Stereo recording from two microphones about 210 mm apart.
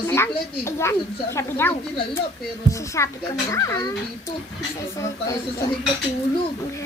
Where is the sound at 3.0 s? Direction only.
15° left (ahead or behind).